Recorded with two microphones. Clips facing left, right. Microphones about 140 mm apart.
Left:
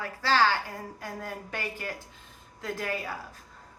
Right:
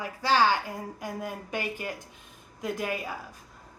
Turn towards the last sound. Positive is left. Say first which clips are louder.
# right 2 dB
turn(degrees=-15)  # may be behind; listen again after turning